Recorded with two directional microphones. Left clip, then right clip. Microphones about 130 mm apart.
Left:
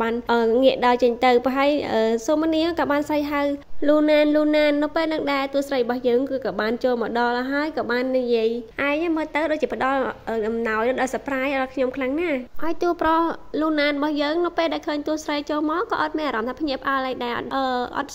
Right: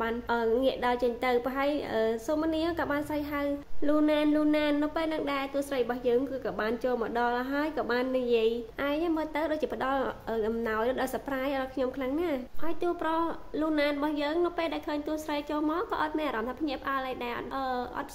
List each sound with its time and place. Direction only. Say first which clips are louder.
0.0 s a woman's voice: left 8 dB; 60° left (ahead or behind); by 12.4 s 35° left (ahead or behind)
12.8 s a woman's voice: left 9 dB; 55° left (ahead or behind)